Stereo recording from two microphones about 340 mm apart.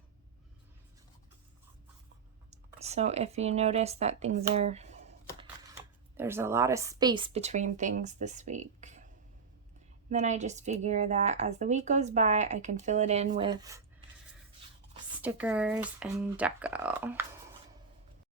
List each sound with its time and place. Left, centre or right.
2.5 s speech: centre
6.1 s speech: centre
10.1 s speech: right
14.9 s speech: centre